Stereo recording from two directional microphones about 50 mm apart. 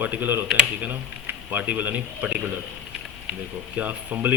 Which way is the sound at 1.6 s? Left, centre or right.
Right.